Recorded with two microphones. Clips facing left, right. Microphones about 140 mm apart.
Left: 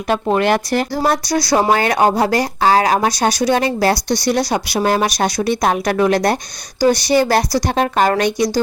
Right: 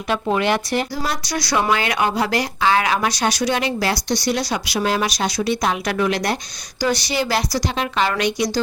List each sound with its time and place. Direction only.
0.1 s speech: 45° left (ahead or behind)
1.4 s speech: 35° left (ahead or behind)